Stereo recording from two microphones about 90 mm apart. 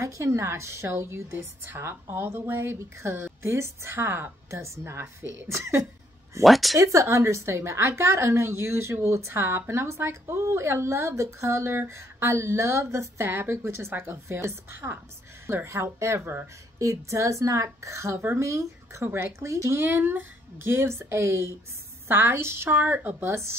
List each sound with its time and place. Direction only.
0.0 s a woman's voice: 35° right (ahead or behind)
6.4 s speech: centre (ahead or behind)
6.8 s a woman's voice: 35° right (ahead or behind)